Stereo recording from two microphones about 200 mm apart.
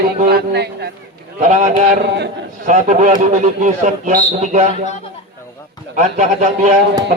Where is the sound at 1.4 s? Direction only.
35° right (ahead or behind).